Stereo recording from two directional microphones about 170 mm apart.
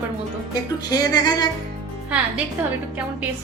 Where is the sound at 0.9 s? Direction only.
25° left (ahead or behind).